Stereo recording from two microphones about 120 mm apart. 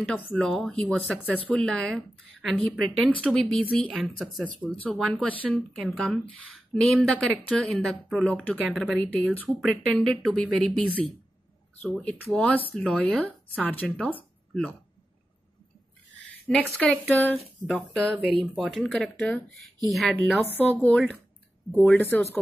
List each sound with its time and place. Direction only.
0.0 s speech: 10° left (ahead or behind)
9.1 s speech: 15° left (ahead or behind)
12.0 s speech: 15° left (ahead or behind)
16.7 s speech: 10° left (ahead or behind)
17.6 s speech: centre (ahead or behind)
18.9 s speech: 10° left (ahead or behind)
20.5 s speech: 15° left (ahead or behind)